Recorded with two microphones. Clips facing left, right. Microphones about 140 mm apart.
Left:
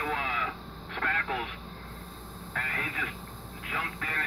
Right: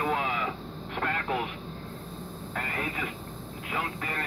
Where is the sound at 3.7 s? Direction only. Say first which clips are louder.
Right 3 dB; 20° right (ahead or behind).